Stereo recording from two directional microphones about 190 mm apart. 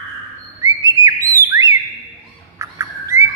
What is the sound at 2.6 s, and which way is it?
Bird, 15° right (ahead or behind).